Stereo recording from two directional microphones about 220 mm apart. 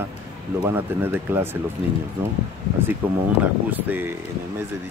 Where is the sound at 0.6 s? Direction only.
10° right (ahead or behind).